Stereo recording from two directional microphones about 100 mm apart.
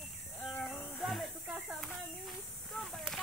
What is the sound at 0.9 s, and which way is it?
Snake, centre (ahead or behind).